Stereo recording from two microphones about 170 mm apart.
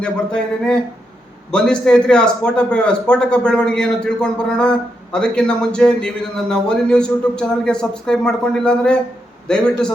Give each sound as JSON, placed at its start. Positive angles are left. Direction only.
{"t": 0.0, "sound": "a man's voice", "side_deg": 5}